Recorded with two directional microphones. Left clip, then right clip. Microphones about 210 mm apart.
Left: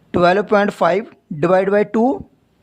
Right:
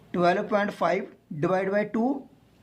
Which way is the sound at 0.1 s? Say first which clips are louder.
Left 10 dB; 45° left (ahead or behind).